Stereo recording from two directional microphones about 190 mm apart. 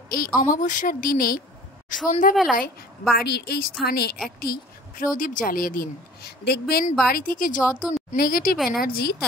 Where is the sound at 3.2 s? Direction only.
60° left (ahead or behind).